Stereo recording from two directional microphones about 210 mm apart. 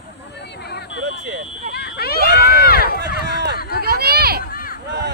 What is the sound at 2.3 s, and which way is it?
Run, 45° right (ahead or behind).